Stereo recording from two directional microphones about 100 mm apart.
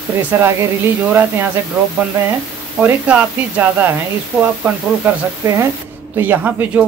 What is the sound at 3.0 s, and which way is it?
Speech, 15° right (ahead or behind).